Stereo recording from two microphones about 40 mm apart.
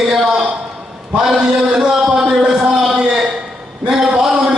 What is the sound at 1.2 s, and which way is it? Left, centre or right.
Chant, centre.